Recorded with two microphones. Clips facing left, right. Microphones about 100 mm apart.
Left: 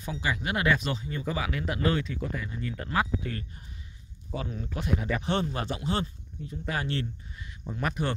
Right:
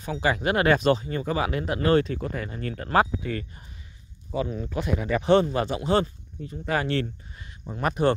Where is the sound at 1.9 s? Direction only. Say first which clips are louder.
Right 8 dB; 55° right (ahead or behind).